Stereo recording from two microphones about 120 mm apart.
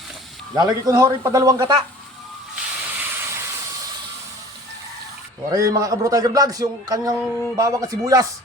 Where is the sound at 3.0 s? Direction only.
20° right (ahead or behind).